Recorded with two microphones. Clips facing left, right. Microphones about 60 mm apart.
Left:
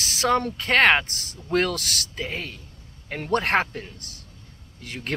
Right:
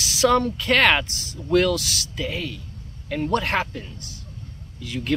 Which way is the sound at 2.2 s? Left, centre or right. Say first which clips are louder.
Right 3 dB; left.